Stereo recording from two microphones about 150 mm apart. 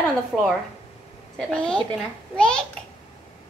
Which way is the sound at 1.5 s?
5° left (ahead or behind).